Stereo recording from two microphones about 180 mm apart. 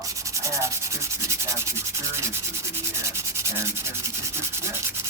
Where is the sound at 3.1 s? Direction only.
15° right (ahead or behind).